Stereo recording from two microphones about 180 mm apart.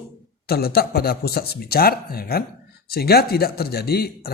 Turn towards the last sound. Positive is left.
turn(degrees=60)  # may be behind; listen again after turning